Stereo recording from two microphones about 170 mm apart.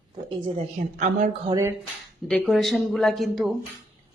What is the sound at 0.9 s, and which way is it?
Speech, 45° right (ahead or behind).